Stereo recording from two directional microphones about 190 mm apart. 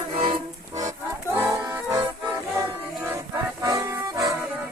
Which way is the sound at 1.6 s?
20° right (ahead or behind).